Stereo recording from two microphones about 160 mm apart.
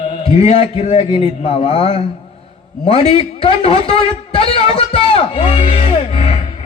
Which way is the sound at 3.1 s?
35° left (ahead or behind).